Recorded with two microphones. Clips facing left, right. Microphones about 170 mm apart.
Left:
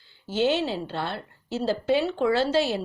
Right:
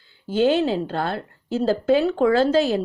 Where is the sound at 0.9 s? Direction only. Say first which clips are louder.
Right 5 dB; 45° right (ahead or behind).